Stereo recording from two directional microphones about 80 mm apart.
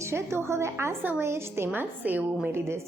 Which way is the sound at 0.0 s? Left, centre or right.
Right.